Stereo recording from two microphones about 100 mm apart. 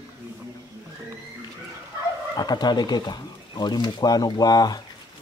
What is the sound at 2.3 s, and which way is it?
Speech, 45° left (ahead or behind).